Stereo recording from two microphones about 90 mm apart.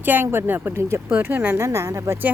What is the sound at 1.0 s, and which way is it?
Speech, 20° right (ahead or behind).